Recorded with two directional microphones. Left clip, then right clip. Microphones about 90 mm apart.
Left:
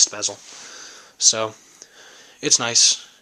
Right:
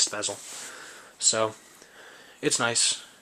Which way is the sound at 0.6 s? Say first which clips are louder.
Left 3 dB; 35° left (ahead or behind).